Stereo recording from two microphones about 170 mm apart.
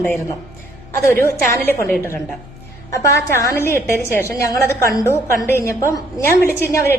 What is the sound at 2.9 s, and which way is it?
A woman's voice, 20° left (ahead or behind).